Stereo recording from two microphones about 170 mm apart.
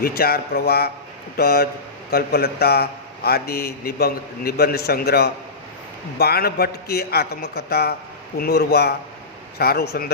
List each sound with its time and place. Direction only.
0.0 s a man's voice: 65° left (ahead or behind)